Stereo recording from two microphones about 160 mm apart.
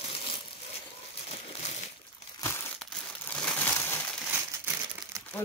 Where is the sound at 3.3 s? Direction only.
10° left (ahead or behind).